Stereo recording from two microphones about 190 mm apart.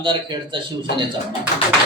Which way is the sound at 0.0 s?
25° right (ahead or behind).